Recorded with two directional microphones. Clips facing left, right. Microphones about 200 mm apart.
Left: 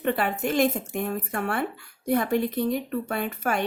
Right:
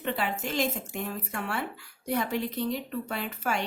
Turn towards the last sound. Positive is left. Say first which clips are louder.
# left 5 dB
turn(degrees=55)  # may be behind; listen again after turning